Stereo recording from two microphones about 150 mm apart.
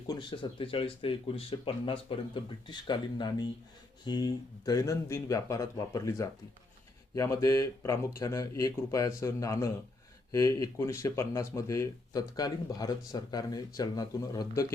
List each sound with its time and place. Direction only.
0.1 s speech: 30° left (ahead or behind)